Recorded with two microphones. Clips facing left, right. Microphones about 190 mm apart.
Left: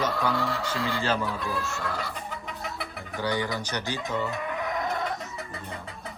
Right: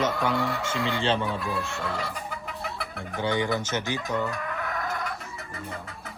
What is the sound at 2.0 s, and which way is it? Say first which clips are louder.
Chicken: right 1 dB; centre (ahead or behind).